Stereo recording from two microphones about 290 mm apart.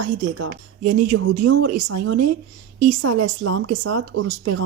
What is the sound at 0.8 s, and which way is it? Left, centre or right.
A woman's voice, right.